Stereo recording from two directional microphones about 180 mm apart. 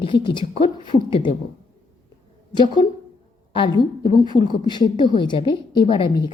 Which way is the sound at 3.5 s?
25° left (ahead or behind).